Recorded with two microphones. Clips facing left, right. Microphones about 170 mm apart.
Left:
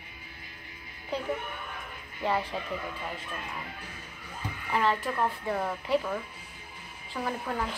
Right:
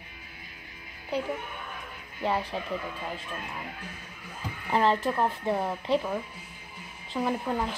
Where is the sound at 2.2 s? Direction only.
15° right (ahead or behind).